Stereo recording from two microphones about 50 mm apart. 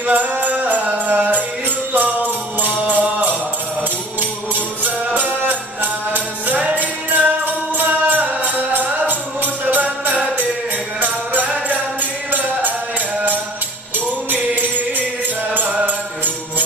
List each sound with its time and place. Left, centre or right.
0.0 s music: right
4.8 s music: right
13.9 s music: right